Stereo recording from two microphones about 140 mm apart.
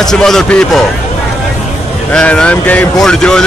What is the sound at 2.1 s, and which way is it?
A man's voice, 5° left (ahead or behind).